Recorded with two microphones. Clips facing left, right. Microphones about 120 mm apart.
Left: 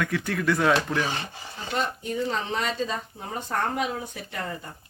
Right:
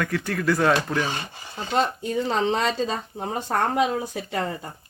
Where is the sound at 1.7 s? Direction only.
90° right.